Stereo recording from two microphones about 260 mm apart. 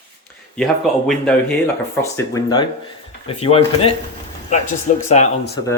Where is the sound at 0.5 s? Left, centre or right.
Centre.